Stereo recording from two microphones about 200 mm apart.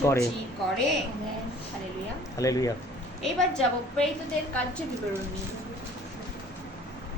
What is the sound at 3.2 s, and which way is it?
Speech, centre (ahead or behind).